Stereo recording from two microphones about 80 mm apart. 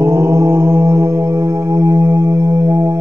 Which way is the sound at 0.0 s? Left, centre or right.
Right.